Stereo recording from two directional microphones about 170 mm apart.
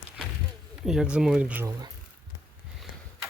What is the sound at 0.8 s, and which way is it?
Speech, 5° right (ahead or behind).